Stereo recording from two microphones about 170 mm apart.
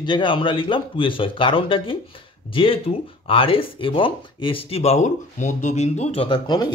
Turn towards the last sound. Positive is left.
turn(degrees=25)  # may be behind; listen again after turning